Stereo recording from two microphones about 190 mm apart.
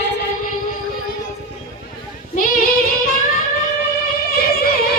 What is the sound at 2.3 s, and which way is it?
Child singing, 45° left (ahead or behind).